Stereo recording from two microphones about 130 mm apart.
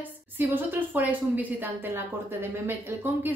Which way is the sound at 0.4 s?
15° right (ahead or behind).